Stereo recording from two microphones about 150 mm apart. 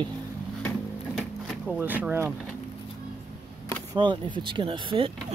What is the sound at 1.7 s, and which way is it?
Speech, 10° right (ahead or behind).